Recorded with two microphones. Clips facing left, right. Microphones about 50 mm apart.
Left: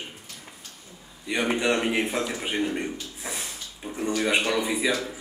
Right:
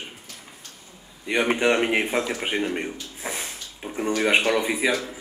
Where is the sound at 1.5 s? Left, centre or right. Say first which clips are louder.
Right 3 dB; right.